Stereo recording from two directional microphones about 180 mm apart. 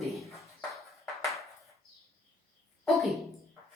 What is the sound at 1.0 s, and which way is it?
Ping, centre (ahead or behind).